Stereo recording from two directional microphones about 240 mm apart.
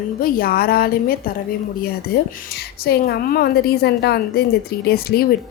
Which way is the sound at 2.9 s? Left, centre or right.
Left.